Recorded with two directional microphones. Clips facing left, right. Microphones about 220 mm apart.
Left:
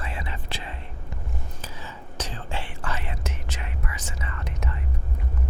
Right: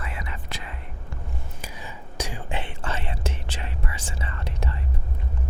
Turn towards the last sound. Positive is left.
turn(degrees=-30)  # may be behind; listen again after turning